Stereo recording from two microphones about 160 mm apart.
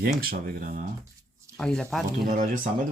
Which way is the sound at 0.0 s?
70° right (ahead or behind).